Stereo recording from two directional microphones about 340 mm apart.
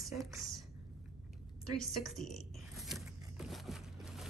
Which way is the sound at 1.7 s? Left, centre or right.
Centre.